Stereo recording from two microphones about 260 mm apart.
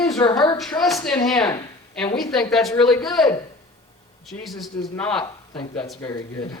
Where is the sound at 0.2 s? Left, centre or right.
Centre.